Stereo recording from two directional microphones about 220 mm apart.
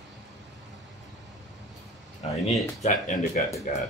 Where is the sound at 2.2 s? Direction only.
25° left (ahead or behind).